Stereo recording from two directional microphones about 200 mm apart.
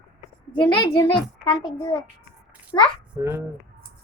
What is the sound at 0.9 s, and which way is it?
A child's voice, 25° left (ahead or behind).